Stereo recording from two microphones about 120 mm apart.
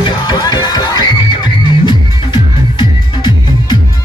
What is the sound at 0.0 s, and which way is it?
Music, 35° left (ahead or behind).